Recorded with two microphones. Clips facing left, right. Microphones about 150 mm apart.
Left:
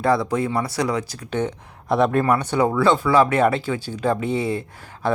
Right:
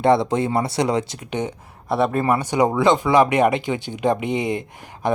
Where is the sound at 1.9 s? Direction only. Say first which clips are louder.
Left 1 dB; 5° right (ahead or behind).